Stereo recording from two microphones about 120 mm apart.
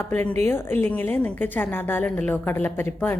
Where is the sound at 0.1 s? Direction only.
10° left (ahead or behind).